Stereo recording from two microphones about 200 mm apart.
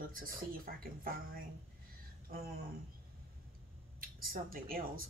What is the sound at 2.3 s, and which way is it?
Speech, 50° right (ahead or behind).